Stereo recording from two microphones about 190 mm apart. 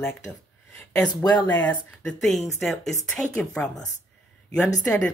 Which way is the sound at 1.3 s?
20° left (ahead or behind).